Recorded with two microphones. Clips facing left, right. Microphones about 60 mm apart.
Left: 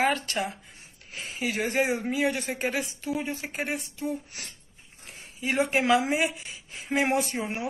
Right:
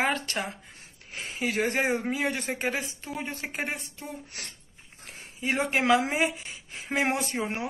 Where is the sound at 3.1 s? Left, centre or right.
Right.